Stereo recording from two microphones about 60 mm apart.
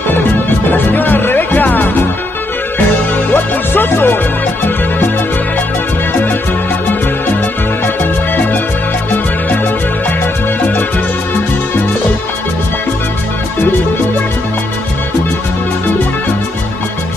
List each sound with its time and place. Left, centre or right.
0.7 s music: left
3.3 s music: left